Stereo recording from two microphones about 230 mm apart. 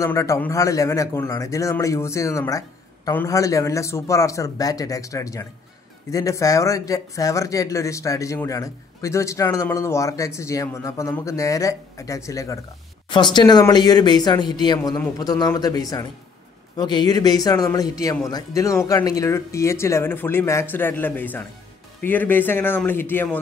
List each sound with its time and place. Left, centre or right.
0.0 s speech: centre